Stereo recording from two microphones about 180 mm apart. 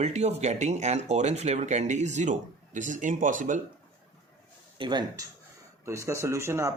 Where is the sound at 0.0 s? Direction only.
40° right (ahead or behind).